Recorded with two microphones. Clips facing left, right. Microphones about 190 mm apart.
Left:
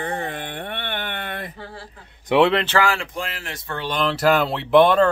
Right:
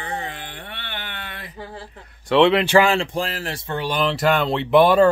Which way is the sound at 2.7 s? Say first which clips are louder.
Right 5 dB; 20° right (ahead or behind).